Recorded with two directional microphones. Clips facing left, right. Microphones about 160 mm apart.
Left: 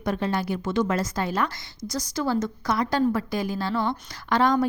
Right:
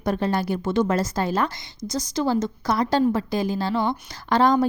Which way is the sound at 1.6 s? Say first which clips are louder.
Right 3 dB; 20° right (ahead or behind).